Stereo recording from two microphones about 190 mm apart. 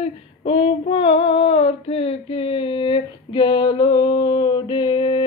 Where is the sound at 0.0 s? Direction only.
30° left (ahead or behind).